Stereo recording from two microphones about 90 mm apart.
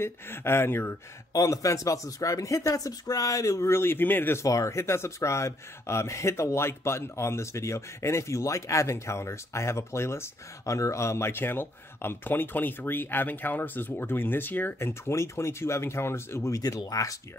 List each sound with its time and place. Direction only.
0.0 s speech: 25° left (ahead or behind)
1.3 s speech: 40° left (ahead or behind); by 4.4 s 20° left (ahead or behind)
4.4 s speech: 35° left (ahead or behind)